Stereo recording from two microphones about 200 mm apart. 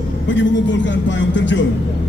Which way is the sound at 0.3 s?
65° left (ahead or behind).